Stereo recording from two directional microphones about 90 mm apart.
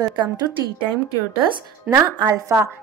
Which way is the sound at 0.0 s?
55° right (ahead or behind).